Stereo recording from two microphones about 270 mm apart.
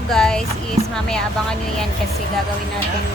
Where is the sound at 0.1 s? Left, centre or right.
Centre.